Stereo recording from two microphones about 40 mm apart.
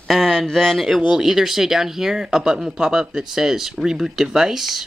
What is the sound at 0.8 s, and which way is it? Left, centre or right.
A man's voice, centre.